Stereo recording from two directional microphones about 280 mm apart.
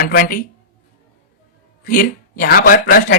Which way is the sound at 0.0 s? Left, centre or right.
Left.